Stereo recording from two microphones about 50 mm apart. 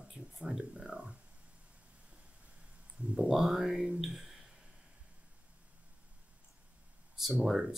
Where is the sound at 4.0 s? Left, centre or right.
Centre.